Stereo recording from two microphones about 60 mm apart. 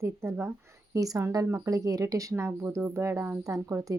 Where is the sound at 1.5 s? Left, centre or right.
Right.